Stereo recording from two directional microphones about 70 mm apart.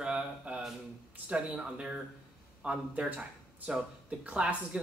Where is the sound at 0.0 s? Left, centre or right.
Centre.